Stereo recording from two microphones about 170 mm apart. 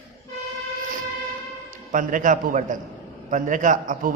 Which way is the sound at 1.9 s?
50° right (ahead or behind).